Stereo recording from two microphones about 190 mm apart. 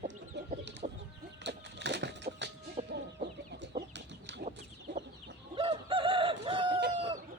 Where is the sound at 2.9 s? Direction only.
60° right (ahead or behind).